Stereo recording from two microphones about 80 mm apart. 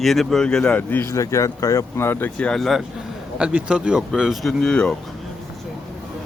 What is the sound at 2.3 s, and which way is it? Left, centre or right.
Speech, centre.